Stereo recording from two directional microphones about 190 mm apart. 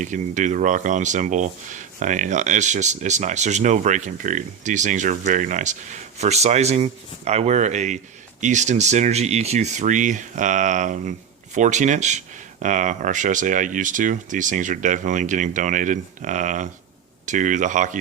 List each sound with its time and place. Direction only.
0.0 s speech: 40° right (ahead or behind)